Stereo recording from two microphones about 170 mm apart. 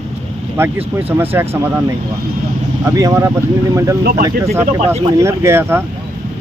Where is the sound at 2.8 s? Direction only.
20° right (ahead or behind).